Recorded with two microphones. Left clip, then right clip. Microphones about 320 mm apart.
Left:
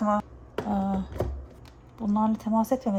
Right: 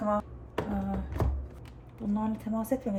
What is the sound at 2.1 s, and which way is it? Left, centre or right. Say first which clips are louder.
Speech: left 8 dB; centre.